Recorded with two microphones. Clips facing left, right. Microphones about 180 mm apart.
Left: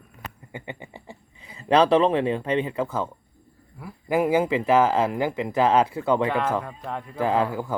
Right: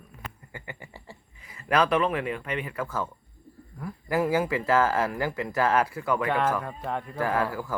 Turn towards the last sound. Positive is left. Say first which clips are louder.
# left 4 dB
turn(degrees=20)  # may be behind; listen again after turning